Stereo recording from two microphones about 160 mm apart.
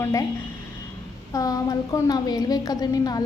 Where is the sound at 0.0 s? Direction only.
20° left (ahead or behind).